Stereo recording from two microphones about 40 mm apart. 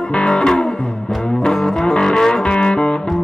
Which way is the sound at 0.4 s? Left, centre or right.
Centre.